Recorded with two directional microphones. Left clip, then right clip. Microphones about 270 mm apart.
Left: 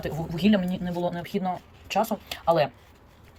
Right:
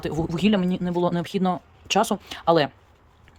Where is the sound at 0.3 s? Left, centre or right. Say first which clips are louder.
Even; centre.